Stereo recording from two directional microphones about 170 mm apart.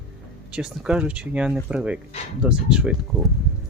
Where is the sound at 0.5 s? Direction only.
5° right (ahead or behind).